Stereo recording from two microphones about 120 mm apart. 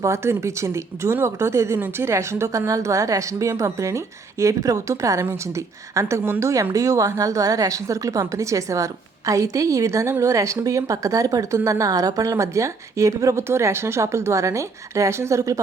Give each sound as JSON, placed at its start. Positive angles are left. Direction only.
{"t": 0.0, "sound": "speech", "side_deg": -20}